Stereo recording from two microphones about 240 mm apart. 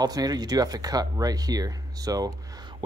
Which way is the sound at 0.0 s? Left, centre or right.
Centre.